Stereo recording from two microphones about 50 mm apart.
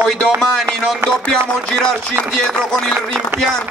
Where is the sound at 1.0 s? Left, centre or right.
Right.